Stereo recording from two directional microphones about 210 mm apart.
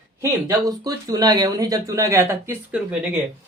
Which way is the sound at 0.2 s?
15° right (ahead or behind).